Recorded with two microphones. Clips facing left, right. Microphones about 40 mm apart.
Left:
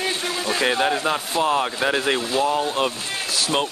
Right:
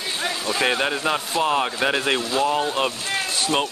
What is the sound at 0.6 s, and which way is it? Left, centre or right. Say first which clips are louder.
Speech: left 1 dB; centre.